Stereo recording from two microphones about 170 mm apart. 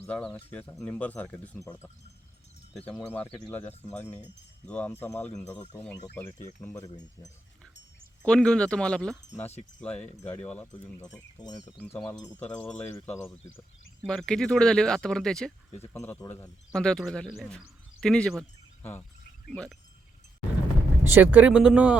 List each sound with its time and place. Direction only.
0.0 s speech: 5° left (ahead or behind)
2.7 s speech: 5° left (ahead or behind)
6.8 s speech: 20° left (ahead or behind)
8.2 s speech: 5° left (ahead or behind)
9.4 s speech: 40° left (ahead or behind)
9.8 s speech: 5° left (ahead or behind)
11.0 s speech: 25° left (ahead or behind)
14.1 s speech: 5° left (ahead or behind)
15.8 s speech: 15° left (ahead or behind)
16.7 s speech: 5° left (ahead or behind)
21.0 s speech: 10° right (ahead or behind)